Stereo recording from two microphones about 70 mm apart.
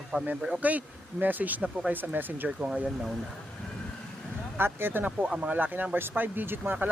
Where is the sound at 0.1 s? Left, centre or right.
Right.